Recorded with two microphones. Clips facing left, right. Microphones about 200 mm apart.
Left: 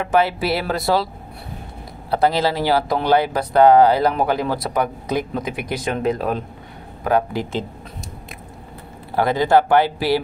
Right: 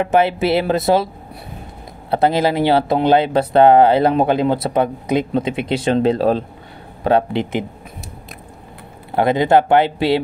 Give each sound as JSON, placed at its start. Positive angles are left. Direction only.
{"t": 0.0, "sound": "speech", "side_deg": -20}
{"t": 9.1, "sound": "speech", "side_deg": -20}